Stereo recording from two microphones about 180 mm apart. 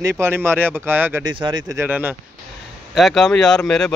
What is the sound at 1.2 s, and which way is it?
Speech, 25° right (ahead or behind).